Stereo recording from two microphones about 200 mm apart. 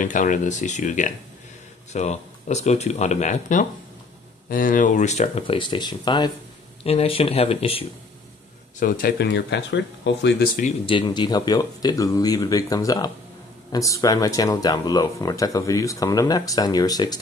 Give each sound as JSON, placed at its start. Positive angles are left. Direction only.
{"t": 0.0, "sound": "speech", "side_deg": 40}
{"t": 8.7, "sound": "speech", "side_deg": 45}
{"t": 10.9, "sound": "speech", "side_deg": 25}